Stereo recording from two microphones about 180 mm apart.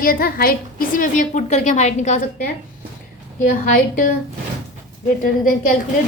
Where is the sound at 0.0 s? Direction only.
55° left (ahead or behind).